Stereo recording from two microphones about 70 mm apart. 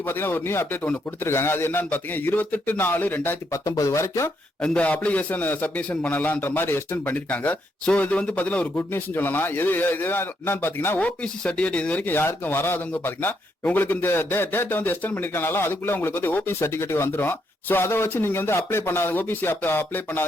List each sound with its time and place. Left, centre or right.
0.0 s a man's voice: left
3.5 s speech: left
4.6 s a man's voice: centre; by 7.2 s left
7.3 s a man's voice: left
11.0 s speech: centre